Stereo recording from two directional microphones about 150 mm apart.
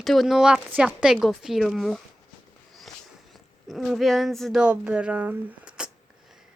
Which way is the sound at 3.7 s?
Centre (ahead or behind).